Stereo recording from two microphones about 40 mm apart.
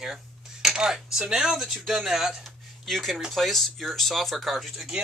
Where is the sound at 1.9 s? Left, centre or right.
Centre.